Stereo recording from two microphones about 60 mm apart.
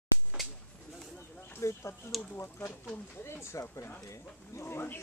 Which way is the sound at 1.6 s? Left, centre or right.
Left.